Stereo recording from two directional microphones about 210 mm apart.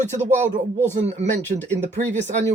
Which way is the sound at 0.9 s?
35° right (ahead or behind).